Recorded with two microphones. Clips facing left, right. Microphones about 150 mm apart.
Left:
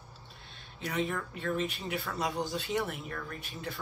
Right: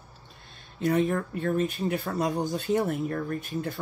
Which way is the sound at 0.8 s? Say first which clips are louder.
Right 9 dB; 45° right (ahead or behind).